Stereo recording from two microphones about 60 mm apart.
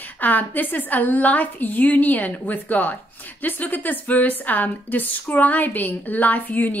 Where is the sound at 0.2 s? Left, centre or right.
Left.